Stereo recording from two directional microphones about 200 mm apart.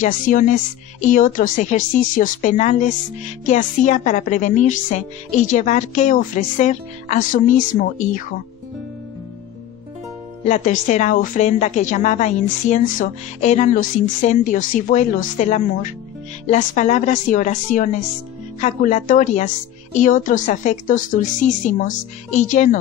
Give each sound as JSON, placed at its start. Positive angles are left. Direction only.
{"t": 0.0, "sound": "a woman's voice", "side_deg": 40}
{"t": 10.5, "sound": "a woman's voice", "side_deg": 35}